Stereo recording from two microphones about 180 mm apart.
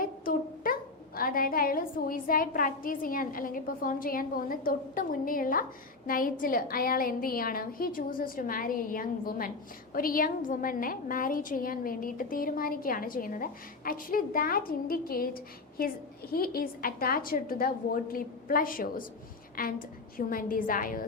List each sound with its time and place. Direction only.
0.0 s a woman's voice: 50° left (ahead or behind)